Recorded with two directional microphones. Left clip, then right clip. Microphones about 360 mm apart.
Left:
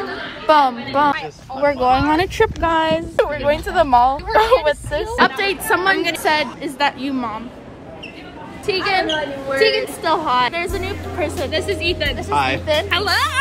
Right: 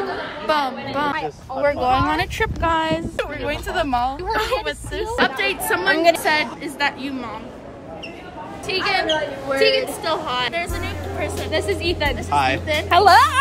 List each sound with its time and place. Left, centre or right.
0.5 s speech: centre
1.1 s speech: right
1.6 s speech: centre
3.2 s a woman's voice: centre
8.6 s a woman's voice: centre
11.5 s speech: right
12.2 s speech: centre
12.9 s a woman's voice: centre